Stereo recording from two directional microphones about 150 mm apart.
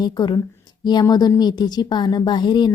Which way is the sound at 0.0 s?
30° left (ahead or behind).